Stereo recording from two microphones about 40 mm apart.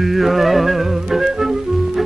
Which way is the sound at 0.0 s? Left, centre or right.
Centre.